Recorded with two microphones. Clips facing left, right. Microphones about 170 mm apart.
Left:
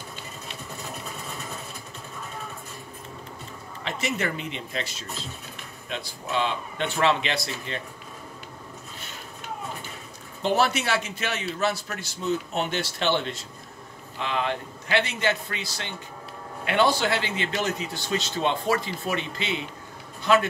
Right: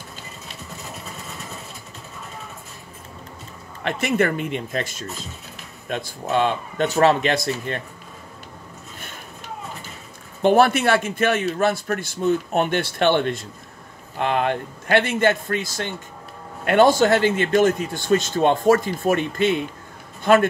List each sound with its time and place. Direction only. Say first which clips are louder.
3.8 s a man's voice: right 8 dB; 55° right (ahead or behind)
10.4 s a man's voice: right 8 dB; 55° right (ahead or behind)